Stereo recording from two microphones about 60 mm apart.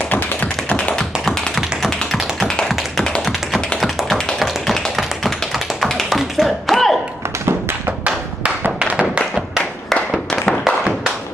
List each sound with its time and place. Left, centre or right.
0.1 s tap: left
0.9 s tap: centre
10.3 s tap: centre
10.6 s tap: centre